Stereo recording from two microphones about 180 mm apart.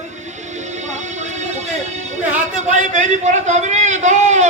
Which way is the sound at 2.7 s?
40° right (ahead or behind).